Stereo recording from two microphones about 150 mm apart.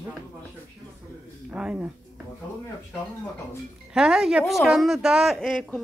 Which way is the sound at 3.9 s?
5° right (ahead or behind).